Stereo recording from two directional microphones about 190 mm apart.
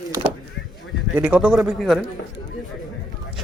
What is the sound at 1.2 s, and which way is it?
Speech, 5° right (ahead or behind).